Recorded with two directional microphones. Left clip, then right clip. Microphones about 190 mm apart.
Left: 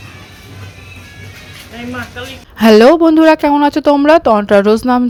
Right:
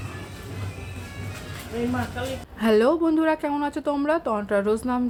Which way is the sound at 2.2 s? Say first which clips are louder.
Left 4 dB; 20° left (ahead or behind).